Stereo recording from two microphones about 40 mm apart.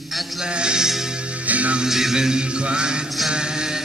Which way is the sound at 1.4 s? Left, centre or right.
Right.